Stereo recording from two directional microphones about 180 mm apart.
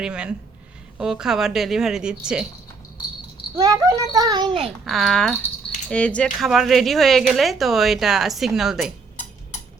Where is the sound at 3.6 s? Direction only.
20° right (ahead or behind).